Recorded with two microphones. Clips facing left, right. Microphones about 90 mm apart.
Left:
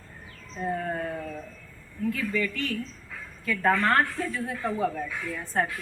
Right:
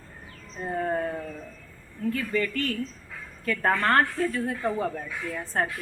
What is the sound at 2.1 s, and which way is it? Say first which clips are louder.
A woman's voice: right 2 dB; 40° right (ahead or behind).